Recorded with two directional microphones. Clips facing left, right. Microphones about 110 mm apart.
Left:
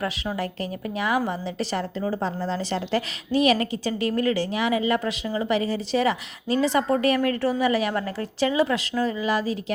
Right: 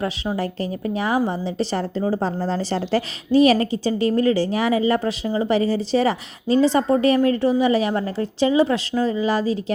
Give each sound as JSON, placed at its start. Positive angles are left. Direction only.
{"t": 0.0, "sound": "a woman's voice", "side_deg": -30}